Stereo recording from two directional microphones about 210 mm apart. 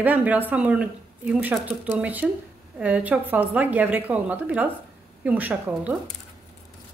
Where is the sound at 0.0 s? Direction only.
10° right (ahead or behind).